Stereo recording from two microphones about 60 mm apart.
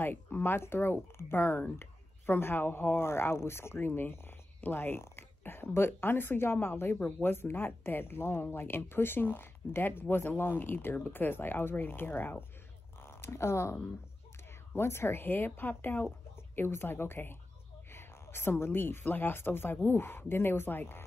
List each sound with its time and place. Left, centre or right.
0.0 s speech: left
13.0 s speech: left